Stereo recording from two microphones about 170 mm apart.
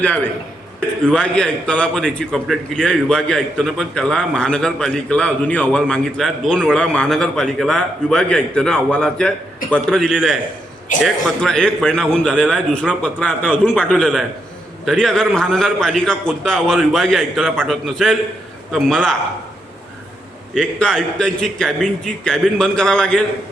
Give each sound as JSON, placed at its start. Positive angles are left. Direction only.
{"t": 0.0, "sound": "a man's voice", "side_deg": 10}
{"t": 20.5, "sound": "a man's voice", "side_deg": 5}